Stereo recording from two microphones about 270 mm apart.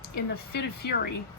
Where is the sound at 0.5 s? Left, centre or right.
Left.